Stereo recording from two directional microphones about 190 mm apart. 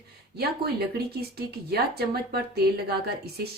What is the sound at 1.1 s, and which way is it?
Speech, 55° right (ahead or behind).